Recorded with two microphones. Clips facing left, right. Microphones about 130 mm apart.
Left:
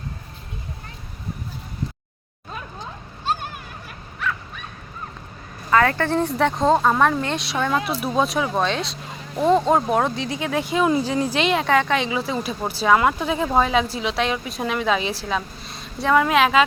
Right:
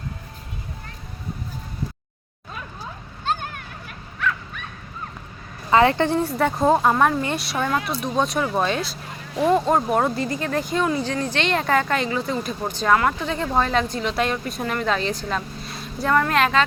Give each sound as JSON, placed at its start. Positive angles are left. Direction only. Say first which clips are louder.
{"t": 5.7, "sound": "speech", "louder": "right 2 dB", "side_deg": -20}
{"t": 6.2, "sound": "speech", "louder": "even", "side_deg": -5}
{"t": 10.8, "sound": "speech", "louder": "left 3 dB", "side_deg": 15}